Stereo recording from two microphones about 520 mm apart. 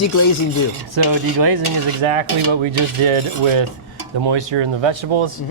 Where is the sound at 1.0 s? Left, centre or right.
Right.